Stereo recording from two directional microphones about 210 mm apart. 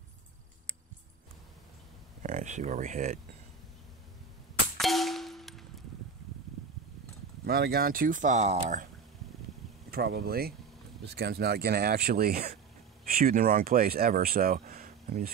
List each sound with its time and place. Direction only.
2.2 s speech: 35° right (ahead or behind)
4.7 s clang: centre (ahead or behind)
7.4 s speech: 45° right (ahead or behind)
9.8 s speech: 45° right (ahead or behind)